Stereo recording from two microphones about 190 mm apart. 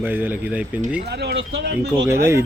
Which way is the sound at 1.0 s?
60° right (ahead or behind).